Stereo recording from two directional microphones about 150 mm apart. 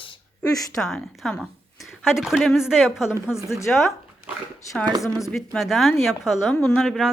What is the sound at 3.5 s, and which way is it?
Speech, 20° left (ahead or behind).